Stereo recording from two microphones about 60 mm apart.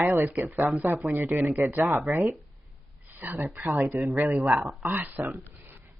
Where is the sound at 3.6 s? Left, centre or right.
Right.